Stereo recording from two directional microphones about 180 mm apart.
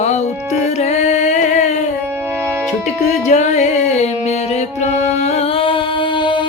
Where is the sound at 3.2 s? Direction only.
40° left (ahead or behind).